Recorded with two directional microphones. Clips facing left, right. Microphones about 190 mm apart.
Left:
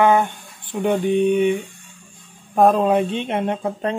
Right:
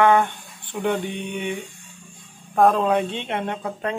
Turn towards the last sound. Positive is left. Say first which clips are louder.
# left 5 dB
turn(degrees=20)  # may be behind; listen again after turning